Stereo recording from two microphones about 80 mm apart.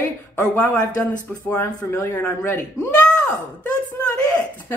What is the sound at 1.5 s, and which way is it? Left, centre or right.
Speech, left.